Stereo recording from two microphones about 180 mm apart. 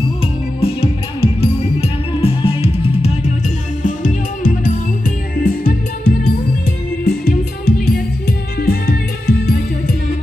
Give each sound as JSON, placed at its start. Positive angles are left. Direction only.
{"t": 0.2, "sound": "music", "side_deg": 30}
{"t": 3.8, "sound": "music", "side_deg": 45}